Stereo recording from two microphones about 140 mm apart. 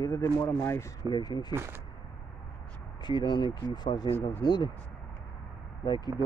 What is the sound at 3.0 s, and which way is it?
Speech, 30° left (ahead or behind).